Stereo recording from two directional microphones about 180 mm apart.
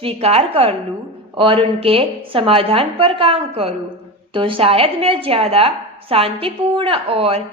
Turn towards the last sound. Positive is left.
turn(degrees=-30)  # may be behind; listen again after turning